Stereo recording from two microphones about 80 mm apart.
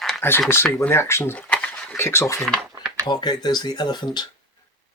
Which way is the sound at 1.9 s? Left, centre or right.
Left.